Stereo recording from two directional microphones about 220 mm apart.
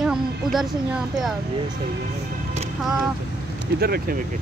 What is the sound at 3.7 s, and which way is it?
Speech, 45° right (ahead or behind).